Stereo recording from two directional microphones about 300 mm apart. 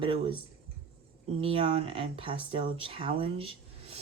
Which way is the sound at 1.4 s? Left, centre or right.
Centre.